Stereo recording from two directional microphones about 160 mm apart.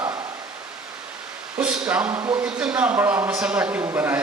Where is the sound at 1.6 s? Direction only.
5° right (ahead or behind).